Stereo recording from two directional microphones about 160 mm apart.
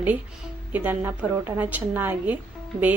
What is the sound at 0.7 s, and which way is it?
A woman's voice, 15° right (ahead or behind).